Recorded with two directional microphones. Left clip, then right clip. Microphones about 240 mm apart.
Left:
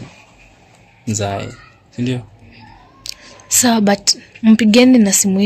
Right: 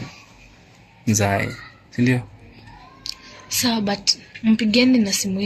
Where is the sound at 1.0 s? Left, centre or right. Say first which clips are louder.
Right 1 dB; centre.